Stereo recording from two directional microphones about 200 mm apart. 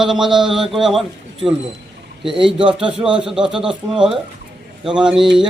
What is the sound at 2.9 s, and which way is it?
A man's voice, 5° right (ahead or behind).